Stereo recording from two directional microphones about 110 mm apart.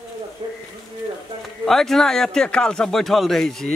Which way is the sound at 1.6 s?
5° left (ahead or behind).